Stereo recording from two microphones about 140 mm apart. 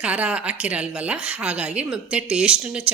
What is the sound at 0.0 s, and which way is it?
A woman's voice, 10° right (ahead or behind).